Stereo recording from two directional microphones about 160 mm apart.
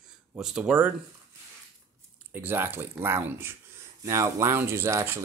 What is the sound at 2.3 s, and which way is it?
Speech, 15° right (ahead or behind).